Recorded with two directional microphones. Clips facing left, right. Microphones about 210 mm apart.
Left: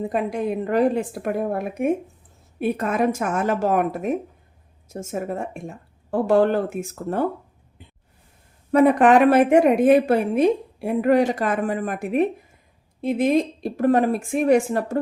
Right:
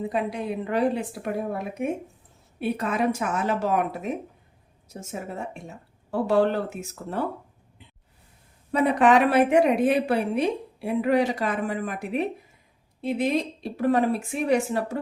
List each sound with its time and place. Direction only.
0.1 s a woman's voice: 50° left (ahead or behind)
8.7 s a woman's voice: 50° left (ahead or behind)